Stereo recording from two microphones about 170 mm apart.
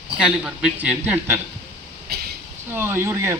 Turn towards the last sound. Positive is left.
turn(degrees=-15)  # may be behind; listen again after turning